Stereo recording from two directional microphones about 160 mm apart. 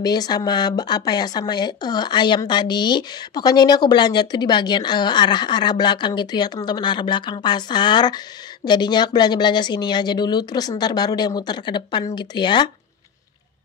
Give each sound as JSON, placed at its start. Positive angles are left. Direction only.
{"t": 0.0, "sound": "speech", "side_deg": 25}